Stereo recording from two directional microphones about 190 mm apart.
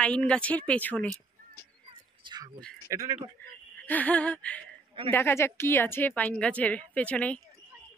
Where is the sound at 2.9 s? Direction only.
15° right (ahead or behind).